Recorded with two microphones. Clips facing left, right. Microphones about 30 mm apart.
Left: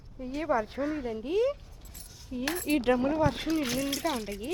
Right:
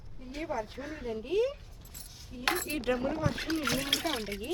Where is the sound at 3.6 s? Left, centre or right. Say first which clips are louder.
Left 1 dB; right.